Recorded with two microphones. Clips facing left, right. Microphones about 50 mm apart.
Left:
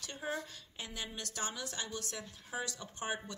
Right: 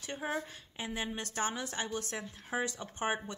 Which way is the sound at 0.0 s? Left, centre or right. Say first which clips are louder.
Right 3 dB; right.